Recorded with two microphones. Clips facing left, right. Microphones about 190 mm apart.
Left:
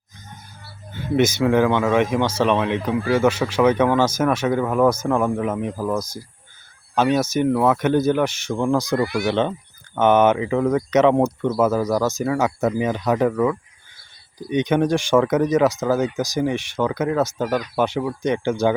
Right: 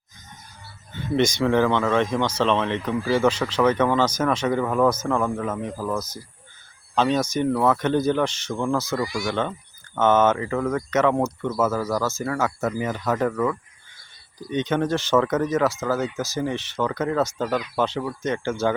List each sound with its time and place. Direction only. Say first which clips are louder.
1.1 s speech: left 3 dB; 5° left (ahead or behind)